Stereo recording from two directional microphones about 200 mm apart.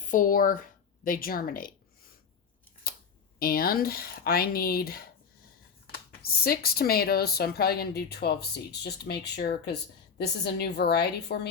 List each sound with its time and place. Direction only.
0.0 s speech: 40° left (ahead or behind)
2.8 s camera: 50° left (ahead or behind)
3.3 s a woman's voice: 50° left (ahead or behind)